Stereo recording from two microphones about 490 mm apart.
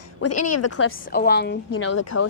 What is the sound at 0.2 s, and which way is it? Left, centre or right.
Speech, left.